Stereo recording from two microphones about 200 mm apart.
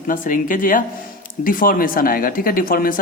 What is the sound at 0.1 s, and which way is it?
Speech, 40° left (ahead or behind).